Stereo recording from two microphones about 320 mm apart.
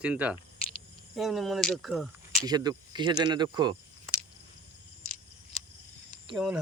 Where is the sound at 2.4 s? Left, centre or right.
Centre.